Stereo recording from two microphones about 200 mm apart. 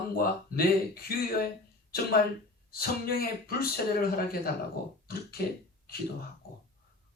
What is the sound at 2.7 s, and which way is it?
Speech, 50° left (ahead or behind).